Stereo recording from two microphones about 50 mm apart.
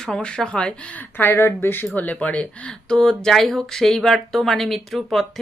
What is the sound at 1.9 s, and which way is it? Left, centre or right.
Speech, left.